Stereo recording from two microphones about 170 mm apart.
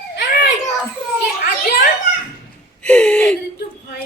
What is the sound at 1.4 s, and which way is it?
Children playing, 55° left (ahead or behind).